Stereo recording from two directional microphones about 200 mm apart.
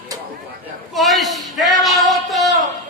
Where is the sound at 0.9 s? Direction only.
Centre (ahead or behind).